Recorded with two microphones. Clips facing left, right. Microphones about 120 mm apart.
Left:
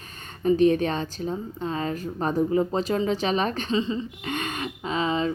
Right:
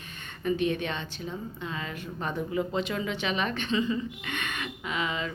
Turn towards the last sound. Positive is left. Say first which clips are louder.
# left 7 dB
turn(degrees=35)  # may be behind; listen again after turning